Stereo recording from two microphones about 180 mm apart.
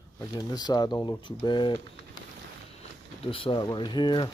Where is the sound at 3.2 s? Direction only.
30° left (ahead or behind).